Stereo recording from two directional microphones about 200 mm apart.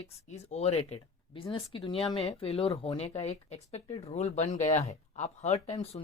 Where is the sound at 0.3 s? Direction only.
35° left (ahead or behind).